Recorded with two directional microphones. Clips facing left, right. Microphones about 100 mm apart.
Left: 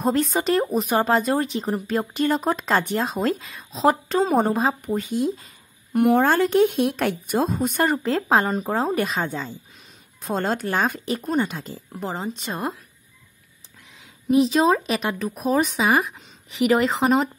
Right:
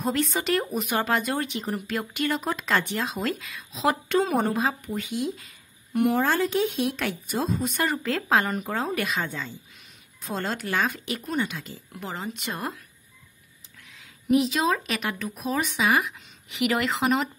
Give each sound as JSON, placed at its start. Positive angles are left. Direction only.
{"t": 0.0, "sound": "speech", "side_deg": 40}
{"t": 5.9, "sound": "speech", "side_deg": 50}
{"t": 13.9, "sound": "speech", "side_deg": 30}